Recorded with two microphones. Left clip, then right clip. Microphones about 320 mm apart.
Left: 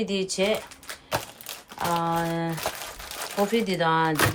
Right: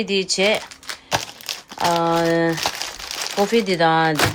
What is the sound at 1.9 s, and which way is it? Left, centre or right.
Speech, centre.